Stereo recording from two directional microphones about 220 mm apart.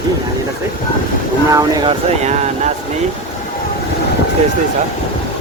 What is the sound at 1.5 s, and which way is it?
Speech, 20° right (ahead or behind).